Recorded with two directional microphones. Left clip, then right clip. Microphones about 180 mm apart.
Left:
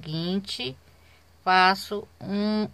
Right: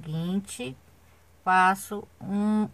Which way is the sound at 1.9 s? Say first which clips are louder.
Left 3 dB; 30° left (ahead or behind).